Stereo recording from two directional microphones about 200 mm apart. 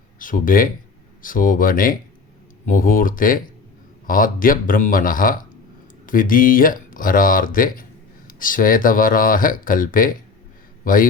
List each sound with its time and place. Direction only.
0.2 s speech: 45° left (ahead or behind)